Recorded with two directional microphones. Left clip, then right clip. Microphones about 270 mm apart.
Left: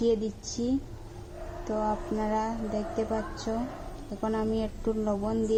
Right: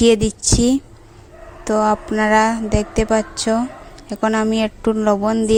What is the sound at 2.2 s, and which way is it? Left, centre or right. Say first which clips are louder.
A woman's voice: right 15 dB; right.